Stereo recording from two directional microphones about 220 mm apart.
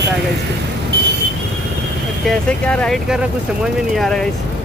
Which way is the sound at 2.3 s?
5° left (ahead or behind).